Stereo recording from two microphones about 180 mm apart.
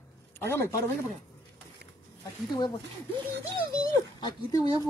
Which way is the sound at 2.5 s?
25° left (ahead or behind).